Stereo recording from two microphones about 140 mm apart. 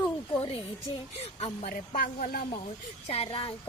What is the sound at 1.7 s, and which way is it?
Speech, 75° left (ahead or behind).